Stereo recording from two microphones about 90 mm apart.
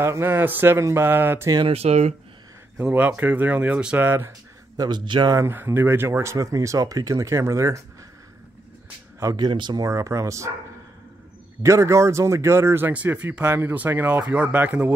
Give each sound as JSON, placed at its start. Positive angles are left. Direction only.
{"t": 0.0, "sound": "speech", "side_deg": -25}
{"t": 2.8, "sound": "speech", "side_deg": -20}
{"t": 4.7, "sound": "a man's voice", "side_deg": -55}
{"t": 5.3, "sound": "speech", "side_deg": -25}
{"t": 9.2, "sound": "speech", "side_deg": -45}
{"t": 9.5, "sound": "a man's voice", "side_deg": -60}
{"t": 9.8, "sound": "speech", "side_deg": -35}
{"t": 11.6, "sound": "speech", "side_deg": -35}